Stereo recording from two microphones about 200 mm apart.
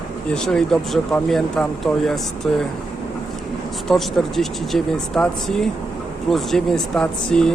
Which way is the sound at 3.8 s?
Centre (ahead or behind).